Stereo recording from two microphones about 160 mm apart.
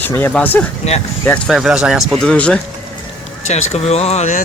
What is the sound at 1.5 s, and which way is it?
Speech, 5° right (ahead or behind).